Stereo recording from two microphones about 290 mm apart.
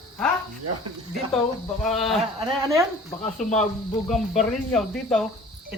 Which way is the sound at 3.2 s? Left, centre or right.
Left.